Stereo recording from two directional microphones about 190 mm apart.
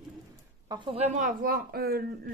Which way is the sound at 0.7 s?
25° right (ahead or behind).